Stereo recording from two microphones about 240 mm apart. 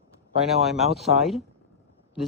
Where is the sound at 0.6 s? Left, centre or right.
Centre.